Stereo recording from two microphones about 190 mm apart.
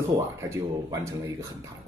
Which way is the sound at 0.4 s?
15° right (ahead or behind).